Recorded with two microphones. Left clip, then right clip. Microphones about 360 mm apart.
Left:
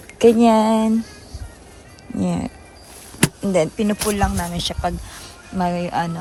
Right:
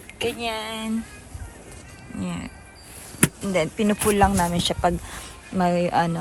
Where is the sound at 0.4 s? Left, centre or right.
Centre.